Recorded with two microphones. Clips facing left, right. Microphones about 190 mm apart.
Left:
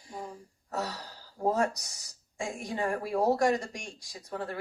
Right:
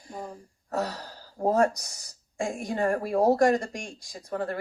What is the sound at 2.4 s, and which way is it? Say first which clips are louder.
Speech: right 5 dB; 55° right (ahead or behind).